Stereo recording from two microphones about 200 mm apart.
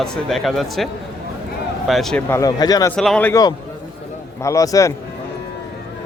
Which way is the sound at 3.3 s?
20° left (ahead or behind).